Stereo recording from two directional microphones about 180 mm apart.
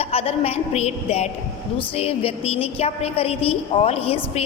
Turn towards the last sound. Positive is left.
turn(degrees=30)  # may be behind; listen again after turning